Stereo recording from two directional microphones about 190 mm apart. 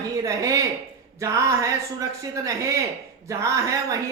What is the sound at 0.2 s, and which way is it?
A woman's voice, 15° right (ahead or behind).